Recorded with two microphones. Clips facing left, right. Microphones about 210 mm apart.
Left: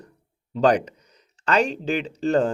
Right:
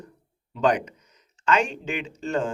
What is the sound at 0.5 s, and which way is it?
Speech, 35° left (ahead or behind).